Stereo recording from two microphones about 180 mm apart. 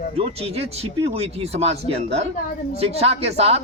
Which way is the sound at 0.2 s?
35° right (ahead or behind).